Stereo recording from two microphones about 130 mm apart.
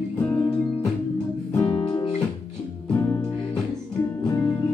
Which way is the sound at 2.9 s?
15° left (ahead or behind).